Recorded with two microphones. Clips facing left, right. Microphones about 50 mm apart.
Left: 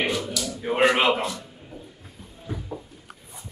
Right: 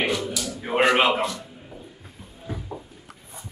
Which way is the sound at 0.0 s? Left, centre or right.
Centre.